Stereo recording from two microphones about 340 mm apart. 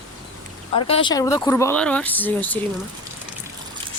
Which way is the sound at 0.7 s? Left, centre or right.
Centre.